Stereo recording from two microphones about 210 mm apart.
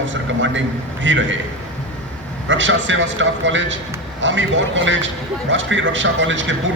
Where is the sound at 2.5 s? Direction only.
60° right (ahead or behind).